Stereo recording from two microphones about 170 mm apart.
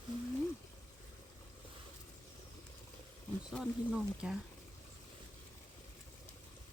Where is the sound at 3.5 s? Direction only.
Centre (ahead or behind).